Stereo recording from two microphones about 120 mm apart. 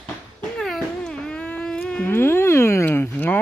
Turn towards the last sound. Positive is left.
turn(degrees=15)  # may be behind; listen again after turning